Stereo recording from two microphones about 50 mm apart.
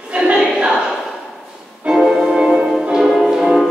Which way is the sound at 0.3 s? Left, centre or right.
Centre.